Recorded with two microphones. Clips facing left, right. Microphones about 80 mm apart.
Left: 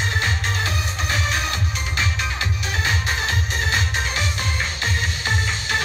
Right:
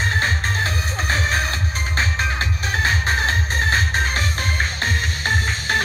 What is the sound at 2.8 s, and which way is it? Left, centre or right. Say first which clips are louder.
Music: right 3 dB; right.